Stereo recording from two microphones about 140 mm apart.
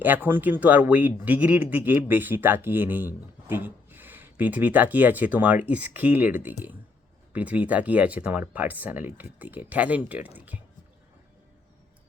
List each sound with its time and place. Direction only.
0.0 s speech: 15° right (ahead or behind)